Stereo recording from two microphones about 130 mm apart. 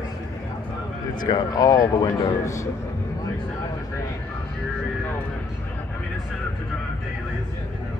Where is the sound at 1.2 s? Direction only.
30° left (ahead or behind).